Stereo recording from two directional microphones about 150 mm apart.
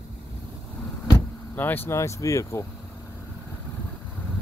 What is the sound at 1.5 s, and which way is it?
Speech, 15° left (ahead or behind).